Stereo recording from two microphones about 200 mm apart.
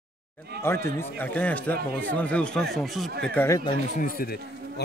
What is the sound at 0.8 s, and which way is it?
Speech, 10° left (ahead or behind).